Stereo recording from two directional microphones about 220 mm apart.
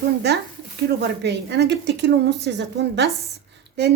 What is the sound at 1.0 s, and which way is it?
A woman's voice, 50° right (ahead or behind).